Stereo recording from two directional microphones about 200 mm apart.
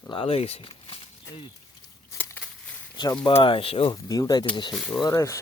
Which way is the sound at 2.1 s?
10° left (ahead or behind).